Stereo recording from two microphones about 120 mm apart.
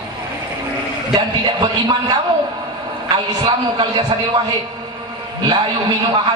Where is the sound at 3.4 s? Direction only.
35° right (ahead or behind).